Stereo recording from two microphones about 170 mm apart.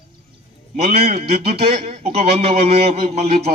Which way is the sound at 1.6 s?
40° right (ahead or behind).